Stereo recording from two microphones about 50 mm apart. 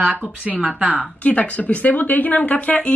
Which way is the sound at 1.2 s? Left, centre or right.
Left.